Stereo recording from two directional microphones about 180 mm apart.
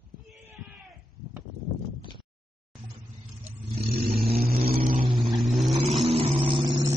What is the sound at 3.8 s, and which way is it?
Vehicle, 60° right (ahead or behind).